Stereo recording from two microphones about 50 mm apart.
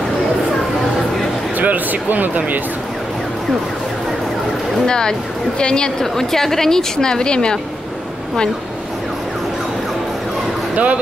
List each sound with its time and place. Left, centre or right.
1.6 s speech: right
4.8 s a woman's voice: centre
10.7 s speech: right